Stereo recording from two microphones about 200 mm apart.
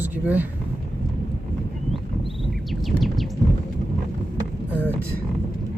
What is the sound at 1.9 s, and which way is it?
Bird, centre (ahead or behind).